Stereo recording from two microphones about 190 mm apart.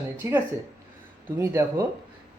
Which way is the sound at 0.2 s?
15° right (ahead or behind).